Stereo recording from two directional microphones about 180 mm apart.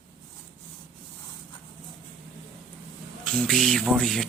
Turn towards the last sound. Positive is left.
turn(degrees=0)  # may be behind; listen again after turning